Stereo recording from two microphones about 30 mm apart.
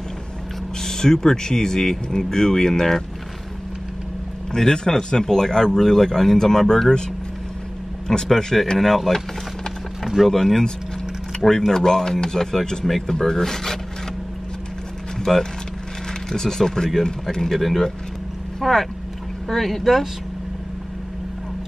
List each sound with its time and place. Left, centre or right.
0.8 s speech: centre
4.6 s speech: left
8.1 s speech: left
8.7 s speech: centre
10.2 s speech: centre
12.8 s speech: centre
15.1 s a sound: centre
16.3 s speech: centre
17.6 s speech: centre